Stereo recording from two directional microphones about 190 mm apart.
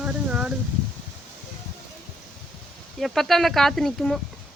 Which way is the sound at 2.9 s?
Centre (ahead or behind).